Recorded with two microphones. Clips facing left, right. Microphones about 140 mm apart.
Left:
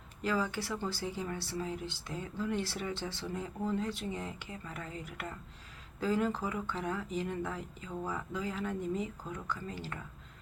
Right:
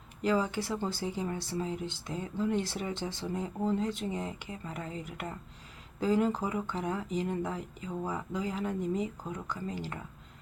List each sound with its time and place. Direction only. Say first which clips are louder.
0.2 s speech: right 4 dB; 20° right (ahead or behind)